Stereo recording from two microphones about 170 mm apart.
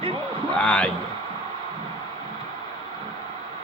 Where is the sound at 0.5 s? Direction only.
5° left (ahead or behind).